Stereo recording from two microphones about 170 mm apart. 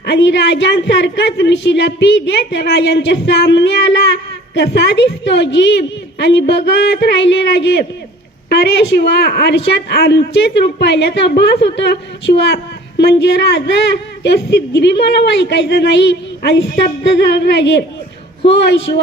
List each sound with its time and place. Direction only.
0.0 s a woman's voice: 85° left